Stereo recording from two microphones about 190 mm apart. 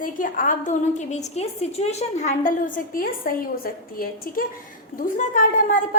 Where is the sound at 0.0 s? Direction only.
45° left (ahead or behind).